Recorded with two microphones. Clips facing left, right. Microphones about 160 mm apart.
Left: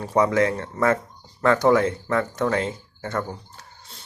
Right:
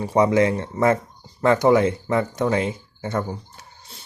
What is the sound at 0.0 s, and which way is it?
Speech, 15° right (ahead or behind).